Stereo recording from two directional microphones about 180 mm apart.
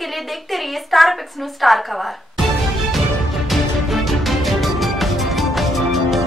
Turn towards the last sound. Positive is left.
turn(degrees=0)  # may be behind; listen again after turning